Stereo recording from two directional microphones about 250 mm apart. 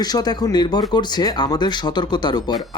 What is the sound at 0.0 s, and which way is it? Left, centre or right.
Speech, centre.